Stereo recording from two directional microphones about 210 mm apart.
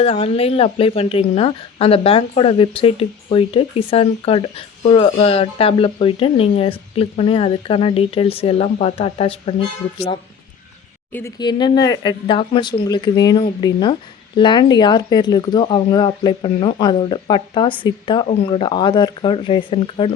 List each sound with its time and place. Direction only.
0.0 s speech: 25° left (ahead or behind)
11.1 s speech: 15° left (ahead or behind)